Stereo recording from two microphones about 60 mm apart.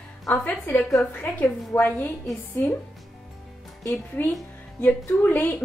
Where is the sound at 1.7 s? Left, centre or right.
Left.